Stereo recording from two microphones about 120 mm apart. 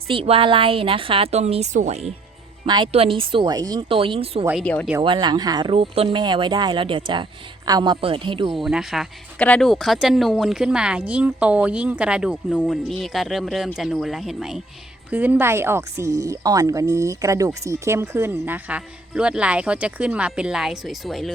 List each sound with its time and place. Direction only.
0.1 s a woman's voice: 50° right (ahead or behind)
1.3 s speech: 60° right (ahead or behind)
2.6 s speech: 40° right (ahead or behind)
2.9 s a woman's voice: 50° right (ahead or behind)
3.5 s speech: 30° right (ahead or behind)
3.8 s a woman's voice: 50° right (ahead or behind)
4.6 s speech: 10° left (ahead or behind)
5.0 s speech: 40° right (ahead or behind)
5.7 s speech: 50° right (ahead or behind); by 7.9 s 35° right (ahead or behind)
8.0 s a woman's voice: 45° right (ahead or behind)
8.5 s speech: 5° right (ahead or behind)
15.1 s speech: 15° right (ahead or behind)